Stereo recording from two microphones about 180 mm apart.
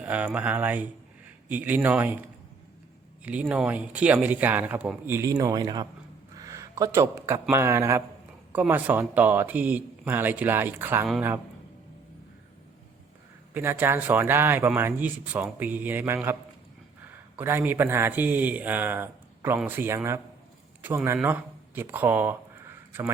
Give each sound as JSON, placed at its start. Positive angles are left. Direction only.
{"t": 0.0, "sound": "speech", "side_deg": -10}
{"t": 3.5, "sound": "speech", "side_deg": -5}
{"t": 6.3, "sound": "a sound", "side_deg": -20}
{"t": 7.5, "sound": "speech", "side_deg": -15}
{"t": 13.5, "sound": "speech", "side_deg": -10}